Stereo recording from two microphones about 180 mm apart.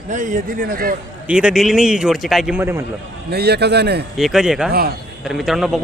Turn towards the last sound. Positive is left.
turn(degrees=0)  # may be behind; listen again after turning